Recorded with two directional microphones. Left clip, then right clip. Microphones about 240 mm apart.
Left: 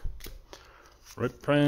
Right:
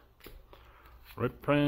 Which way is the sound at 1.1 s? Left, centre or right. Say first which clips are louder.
Left 2 dB; centre.